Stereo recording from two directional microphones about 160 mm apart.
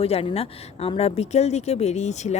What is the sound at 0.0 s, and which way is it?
A woman's voice, 35° left (ahead or behind).